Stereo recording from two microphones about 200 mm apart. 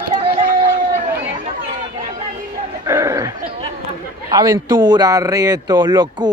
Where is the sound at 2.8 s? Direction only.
15° right (ahead or behind).